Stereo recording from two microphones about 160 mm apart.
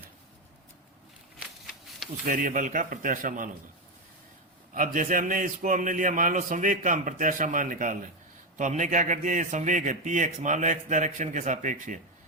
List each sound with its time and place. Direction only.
2.2 s a man's voice: 55° right (ahead or behind)
4.7 s a man's voice: 55° right (ahead or behind)